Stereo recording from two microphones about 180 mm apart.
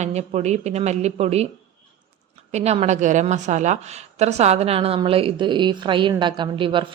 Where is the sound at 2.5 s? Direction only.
35° right (ahead or behind).